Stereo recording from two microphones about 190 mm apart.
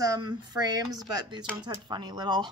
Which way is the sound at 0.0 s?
20° right (ahead or behind).